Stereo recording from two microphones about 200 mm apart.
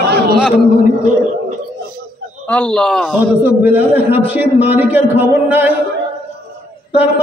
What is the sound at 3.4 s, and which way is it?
A man's voice, 10° right (ahead or behind).